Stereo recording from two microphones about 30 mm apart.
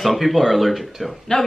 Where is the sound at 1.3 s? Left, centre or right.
Left.